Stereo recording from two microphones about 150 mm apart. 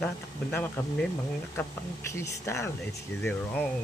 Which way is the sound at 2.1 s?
20° left (ahead or behind).